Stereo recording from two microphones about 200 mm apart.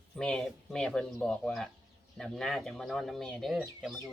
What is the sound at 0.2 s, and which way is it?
Speech, 5° left (ahead or behind).